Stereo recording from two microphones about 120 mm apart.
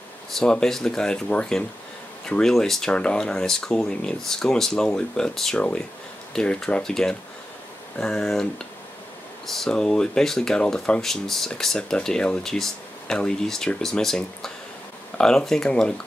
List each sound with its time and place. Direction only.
0.3 s speech: 5° left (ahead or behind)
9.5 s speech: 5° left (ahead or behind)